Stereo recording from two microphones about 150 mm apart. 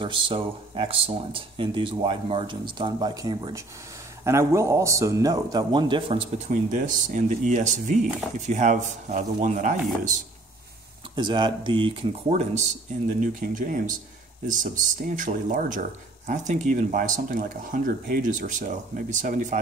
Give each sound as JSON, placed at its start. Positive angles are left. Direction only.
{"t": 0.0, "sound": "speech", "side_deg": -35}
{"t": 11.1, "sound": "speech", "side_deg": -30}
{"t": 12.3, "sound": "speech", "side_deg": -50}
{"t": 13.2, "sound": "speech", "side_deg": -60}